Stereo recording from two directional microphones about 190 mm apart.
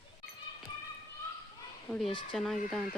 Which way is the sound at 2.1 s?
25° left (ahead or behind).